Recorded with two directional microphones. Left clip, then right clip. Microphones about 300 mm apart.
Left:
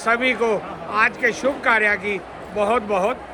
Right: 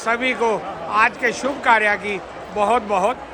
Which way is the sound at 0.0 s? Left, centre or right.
Centre.